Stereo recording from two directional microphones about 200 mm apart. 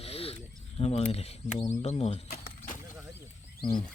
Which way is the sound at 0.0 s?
30° left (ahead or behind).